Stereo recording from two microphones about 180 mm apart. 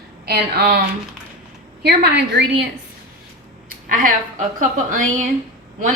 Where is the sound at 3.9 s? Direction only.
50° right (ahead or behind).